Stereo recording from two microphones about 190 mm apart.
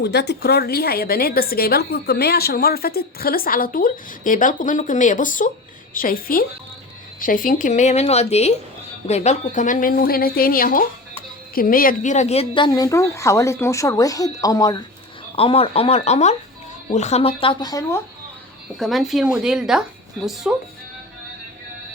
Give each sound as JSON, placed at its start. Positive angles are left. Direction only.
{"t": 0.0, "sound": "a woman's voice", "side_deg": 60}
{"t": 15.4, "sound": "speech", "side_deg": 30}
{"t": 18.8, "sound": "speech", "side_deg": 0}